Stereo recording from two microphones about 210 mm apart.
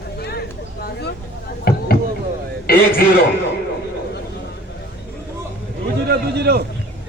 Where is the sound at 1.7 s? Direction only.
45° left (ahead or behind).